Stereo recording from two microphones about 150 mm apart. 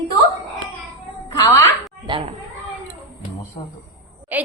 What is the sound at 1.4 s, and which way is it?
Speech, 20° left (ahead or behind).